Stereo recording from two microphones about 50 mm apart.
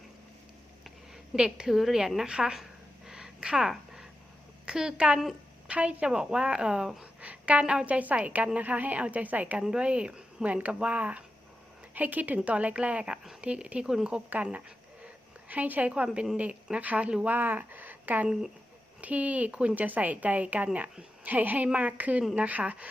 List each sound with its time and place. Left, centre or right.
1.5 s speech: centre
3.1 s a sound: centre
4.6 s a woman's voice: centre
6.1 s speech: centre
7.0 s a sound: right
7.6 s speech: centre
7.9 s speech: right
9.6 s speech: centre
15.0 s a sound: right
15.9 s speech: right
17.2 s speech: right
21.2 s speech: right